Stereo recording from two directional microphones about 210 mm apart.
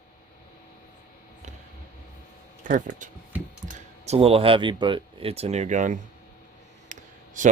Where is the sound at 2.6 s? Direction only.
40° right (ahead or behind).